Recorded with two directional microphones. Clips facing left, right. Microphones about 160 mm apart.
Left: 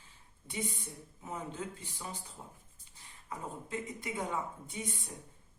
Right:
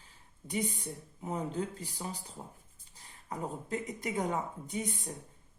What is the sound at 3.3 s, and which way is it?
Speech, 40° right (ahead or behind).